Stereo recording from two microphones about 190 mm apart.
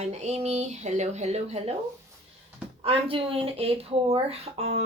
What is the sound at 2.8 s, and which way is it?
Speech, 30° right (ahead or behind).